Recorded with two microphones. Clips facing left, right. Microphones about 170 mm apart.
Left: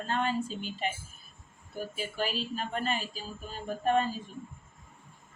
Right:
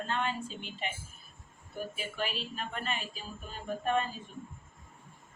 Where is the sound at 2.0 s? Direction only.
40° left (ahead or behind).